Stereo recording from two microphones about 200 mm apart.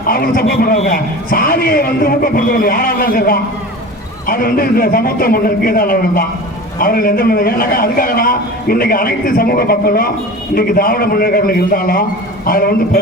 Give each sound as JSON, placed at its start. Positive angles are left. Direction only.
{"t": 0.0, "sound": "a man's voice", "side_deg": 45}